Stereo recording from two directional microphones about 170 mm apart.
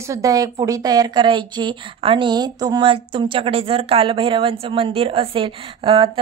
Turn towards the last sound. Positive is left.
turn(degrees=-30)  # may be behind; listen again after turning